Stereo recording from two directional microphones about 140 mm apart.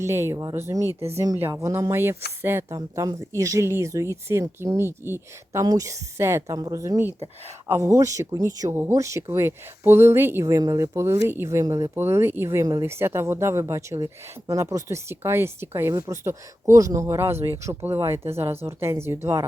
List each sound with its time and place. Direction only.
0.0 s speech: 20° right (ahead or behind)